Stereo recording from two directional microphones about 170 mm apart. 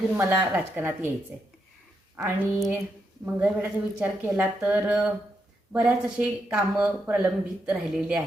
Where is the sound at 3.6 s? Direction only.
10° right (ahead or behind).